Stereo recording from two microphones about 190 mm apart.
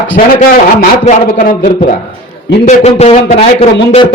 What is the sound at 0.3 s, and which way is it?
A man's voice, 40° left (ahead or behind).